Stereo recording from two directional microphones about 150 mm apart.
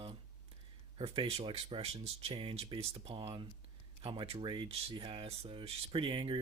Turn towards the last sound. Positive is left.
turn(degrees=-35)  # may be behind; listen again after turning